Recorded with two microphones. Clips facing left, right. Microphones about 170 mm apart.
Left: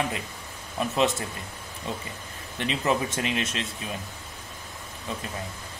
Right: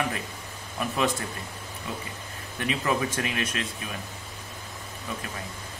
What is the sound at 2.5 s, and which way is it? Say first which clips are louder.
Speech: left 1 dB; 25° left (ahead or behind).